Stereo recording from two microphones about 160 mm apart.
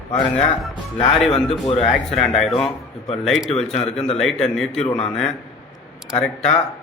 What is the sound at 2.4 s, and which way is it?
Speech, centre (ahead or behind).